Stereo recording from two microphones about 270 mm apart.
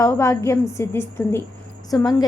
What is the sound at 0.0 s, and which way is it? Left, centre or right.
A woman's voice, centre.